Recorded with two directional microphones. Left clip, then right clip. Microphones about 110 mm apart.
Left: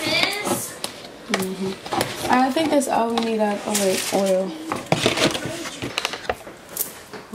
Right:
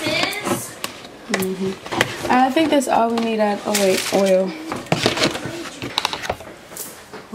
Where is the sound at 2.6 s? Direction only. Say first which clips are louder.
Right 3 dB; 30° right (ahead or behind).